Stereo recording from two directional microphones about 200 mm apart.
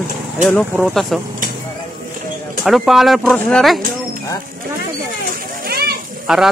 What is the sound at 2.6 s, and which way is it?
Speech, centre (ahead or behind).